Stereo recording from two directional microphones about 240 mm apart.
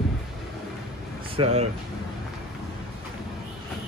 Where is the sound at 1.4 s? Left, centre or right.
Right.